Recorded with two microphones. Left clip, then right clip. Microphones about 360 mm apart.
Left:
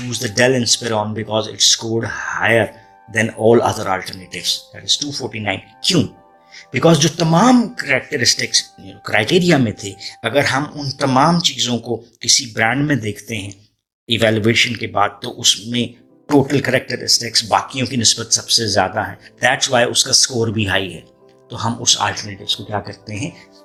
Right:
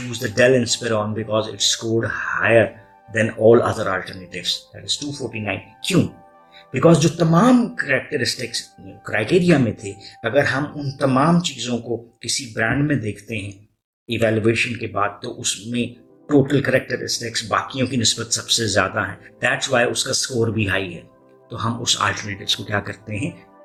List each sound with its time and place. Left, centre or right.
0.1 s speech: centre